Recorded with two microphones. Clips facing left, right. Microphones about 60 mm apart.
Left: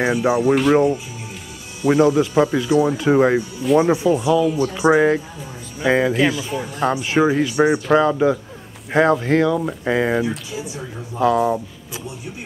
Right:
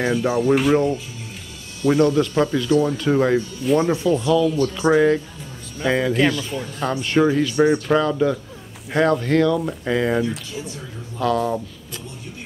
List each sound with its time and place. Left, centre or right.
0.0 s speech: centre